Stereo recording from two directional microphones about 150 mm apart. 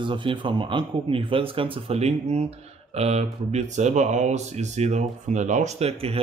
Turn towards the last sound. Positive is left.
turn(degrees=-40)  # may be behind; listen again after turning